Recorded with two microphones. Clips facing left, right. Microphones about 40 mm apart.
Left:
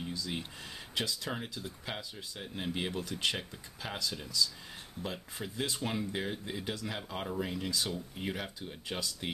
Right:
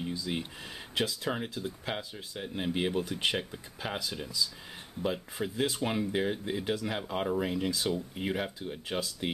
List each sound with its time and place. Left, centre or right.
0.1 s speech: centre